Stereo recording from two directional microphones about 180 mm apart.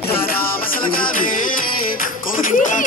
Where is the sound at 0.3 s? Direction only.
55° left (ahead or behind).